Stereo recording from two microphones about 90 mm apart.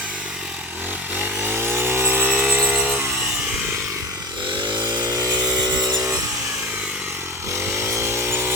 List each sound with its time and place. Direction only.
1.1 s chainsaw: 20° right (ahead or behind)
2.3 s a sound: 15° right (ahead or behind)
2.6 s electric toothbrush: 10° right (ahead or behind)
4.5 s chainsaw: 60° right (ahead or behind)
5.0 s vehicle: 40° right (ahead or behind)
7.5 s wood: 30° right (ahead or behind)